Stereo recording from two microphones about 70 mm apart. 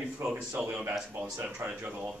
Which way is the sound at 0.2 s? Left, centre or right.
Right.